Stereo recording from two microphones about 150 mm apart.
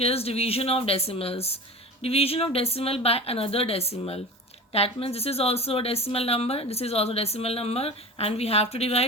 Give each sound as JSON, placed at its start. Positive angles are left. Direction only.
{"t": 0.0, "sound": "speech", "side_deg": 40}